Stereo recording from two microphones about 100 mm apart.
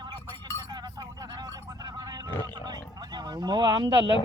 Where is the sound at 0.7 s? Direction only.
40° right (ahead or behind).